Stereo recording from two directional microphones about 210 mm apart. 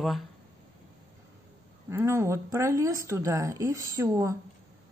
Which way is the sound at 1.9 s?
15° right (ahead or behind).